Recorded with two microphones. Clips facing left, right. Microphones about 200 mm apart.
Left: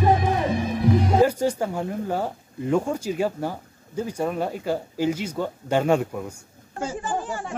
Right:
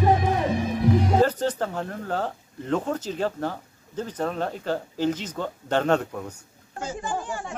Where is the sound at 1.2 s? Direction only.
10° left (ahead or behind).